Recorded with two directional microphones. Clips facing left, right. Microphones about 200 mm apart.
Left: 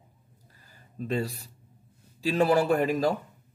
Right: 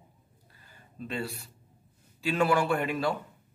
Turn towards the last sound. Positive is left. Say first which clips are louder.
# left 4 dB
turn(degrees=40)  # may be behind; listen again after turning